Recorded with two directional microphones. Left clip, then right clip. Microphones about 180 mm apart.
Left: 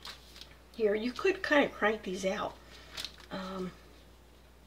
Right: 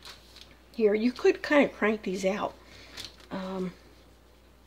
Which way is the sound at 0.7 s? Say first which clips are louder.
Right 5 dB; 40° right (ahead or behind).